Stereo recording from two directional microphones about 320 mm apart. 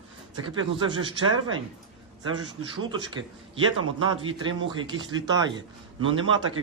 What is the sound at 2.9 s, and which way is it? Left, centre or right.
Speech, centre.